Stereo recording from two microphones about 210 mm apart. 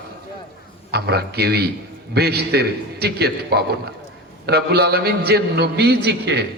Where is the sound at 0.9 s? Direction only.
50° right (ahead or behind).